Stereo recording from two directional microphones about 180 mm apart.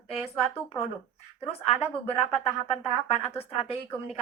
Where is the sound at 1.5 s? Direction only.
35° left (ahead or behind).